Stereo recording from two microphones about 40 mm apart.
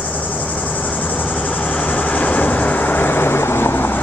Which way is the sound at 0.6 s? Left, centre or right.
Left.